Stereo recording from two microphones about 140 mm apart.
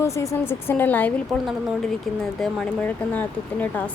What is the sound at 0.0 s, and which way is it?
Speech, 20° left (ahead or behind).